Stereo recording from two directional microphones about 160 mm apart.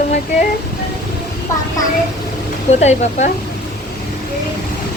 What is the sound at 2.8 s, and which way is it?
Speech, 45° left (ahead or behind).